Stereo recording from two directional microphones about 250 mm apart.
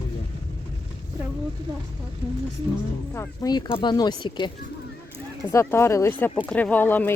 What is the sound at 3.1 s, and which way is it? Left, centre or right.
Speech, centre.